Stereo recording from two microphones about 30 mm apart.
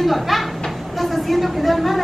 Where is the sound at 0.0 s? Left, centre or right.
Centre.